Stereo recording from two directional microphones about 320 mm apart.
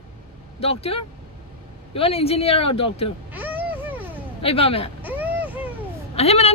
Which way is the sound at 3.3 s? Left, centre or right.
Centre.